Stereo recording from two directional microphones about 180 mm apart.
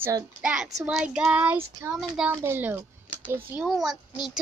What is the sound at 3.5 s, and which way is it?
Child singing, centre (ahead or behind).